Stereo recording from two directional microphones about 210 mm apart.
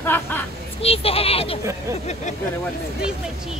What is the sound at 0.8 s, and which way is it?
Speech, 30° left (ahead or behind).